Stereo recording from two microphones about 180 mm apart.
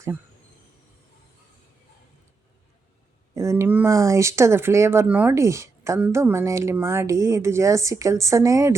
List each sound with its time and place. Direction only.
3.3 s speech: 15° right (ahead or behind)